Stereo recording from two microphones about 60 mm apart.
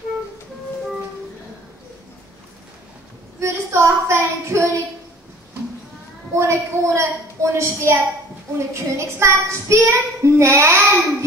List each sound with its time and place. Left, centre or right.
3.3 s child singing: right
6.3 s a woman's voice: right
8.5 s child singing: right